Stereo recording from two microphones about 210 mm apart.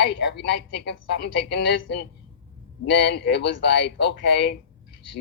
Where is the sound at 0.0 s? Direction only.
55° left (ahead or behind).